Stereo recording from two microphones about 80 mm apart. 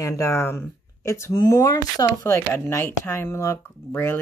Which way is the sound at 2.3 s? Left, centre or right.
Left.